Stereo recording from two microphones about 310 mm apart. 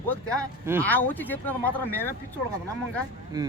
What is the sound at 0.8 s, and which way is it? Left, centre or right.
Speech, centre.